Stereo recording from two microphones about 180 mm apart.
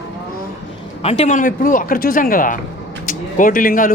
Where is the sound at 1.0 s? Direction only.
35° left (ahead or behind); by 3.9 s 50° left (ahead or behind).